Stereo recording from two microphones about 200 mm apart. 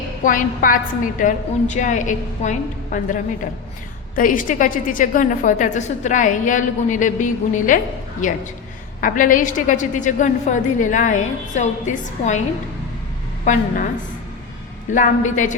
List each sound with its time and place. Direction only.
0.3 s a woman's voice: 45° left (ahead or behind)
13.4 s a woman's voice: 40° left (ahead or behind)
14.8 s a woman's voice: 40° left (ahead or behind)